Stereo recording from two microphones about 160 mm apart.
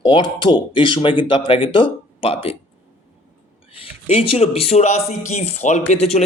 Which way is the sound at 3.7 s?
35° left (ahead or behind).